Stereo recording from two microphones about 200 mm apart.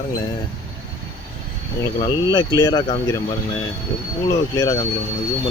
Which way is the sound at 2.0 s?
20° left (ahead or behind).